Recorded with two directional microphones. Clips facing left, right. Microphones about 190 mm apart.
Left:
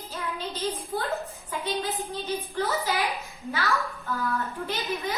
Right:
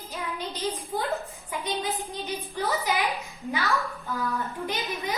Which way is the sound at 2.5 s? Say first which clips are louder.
Right 1 dB; 15° right (ahead or behind).